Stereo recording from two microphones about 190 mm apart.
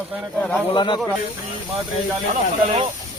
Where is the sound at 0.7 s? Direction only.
25° left (ahead or behind).